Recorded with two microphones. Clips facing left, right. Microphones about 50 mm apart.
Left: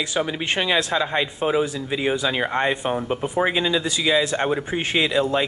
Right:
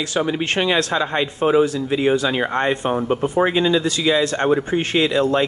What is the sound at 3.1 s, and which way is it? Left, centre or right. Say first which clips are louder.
A man's voice: right 4 dB; centre.